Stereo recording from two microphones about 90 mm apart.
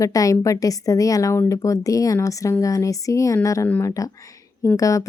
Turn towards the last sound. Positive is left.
turn(degrees=40)  # may be behind; listen again after turning